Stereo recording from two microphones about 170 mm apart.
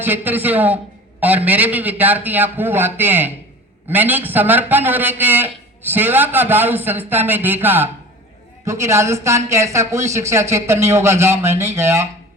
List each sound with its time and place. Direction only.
0.0 s speech: 10° right (ahead or behind)